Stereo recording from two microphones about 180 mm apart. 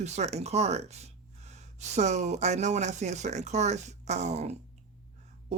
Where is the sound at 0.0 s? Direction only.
40° right (ahead or behind).